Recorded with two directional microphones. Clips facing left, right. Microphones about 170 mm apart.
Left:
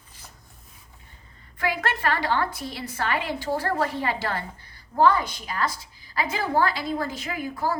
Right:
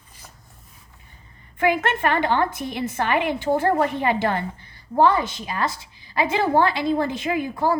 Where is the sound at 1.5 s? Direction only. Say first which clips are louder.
Right 6 dB; 20° right (ahead or behind).